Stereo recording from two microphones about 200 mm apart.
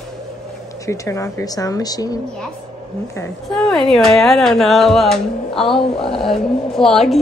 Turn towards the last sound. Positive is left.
turn(degrees=0)  # may be behind; listen again after turning